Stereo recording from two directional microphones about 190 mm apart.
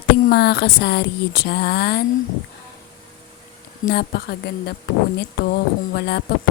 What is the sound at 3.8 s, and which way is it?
Speech, 55° left (ahead or behind).